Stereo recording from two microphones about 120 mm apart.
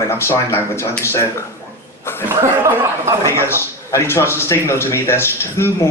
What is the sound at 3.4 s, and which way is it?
A man's voice, 20° left (ahead or behind).